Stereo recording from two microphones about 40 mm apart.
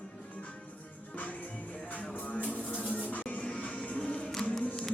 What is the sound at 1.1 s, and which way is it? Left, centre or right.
Music, left.